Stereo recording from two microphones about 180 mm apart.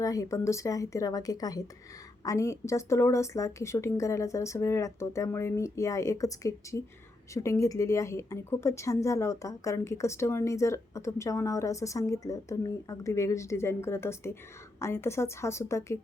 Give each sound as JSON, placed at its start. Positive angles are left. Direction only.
{"t": 0.0, "sound": "a woman's voice", "side_deg": 20}